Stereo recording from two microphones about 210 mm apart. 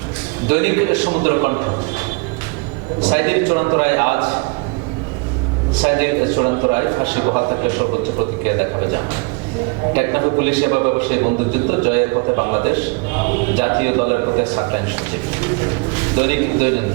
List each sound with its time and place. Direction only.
0.5 s a man's voice: 15° right (ahead or behind)
3.1 s a man's voice: 15° right (ahead or behind)
4.2 s a man's voice: 25° right (ahead or behind)
5.9 s a man's voice: 15° right (ahead or behind)
9.9 s a man's voice: 15° right (ahead or behind)
16.1 s a man's voice: 15° right (ahead or behind)